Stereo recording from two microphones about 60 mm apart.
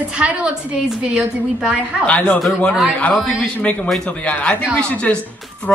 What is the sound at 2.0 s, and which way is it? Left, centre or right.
A man's voice, left.